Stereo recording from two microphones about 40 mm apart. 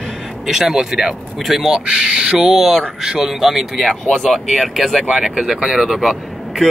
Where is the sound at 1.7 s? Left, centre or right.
Right.